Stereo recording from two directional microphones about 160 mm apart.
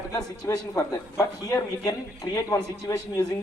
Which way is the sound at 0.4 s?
20° left (ahead or behind).